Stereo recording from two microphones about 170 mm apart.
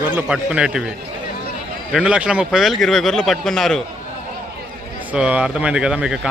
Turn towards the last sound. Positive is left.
turn(degrees=-5)  # may be behind; listen again after turning